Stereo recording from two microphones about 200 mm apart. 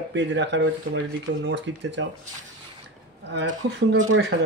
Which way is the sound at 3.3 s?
60° right (ahead or behind).